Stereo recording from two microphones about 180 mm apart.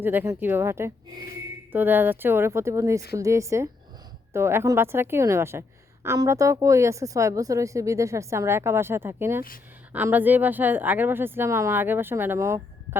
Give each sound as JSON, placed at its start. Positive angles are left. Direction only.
{"t": 0.0, "sound": "a woman's voice", "side_deg": -10}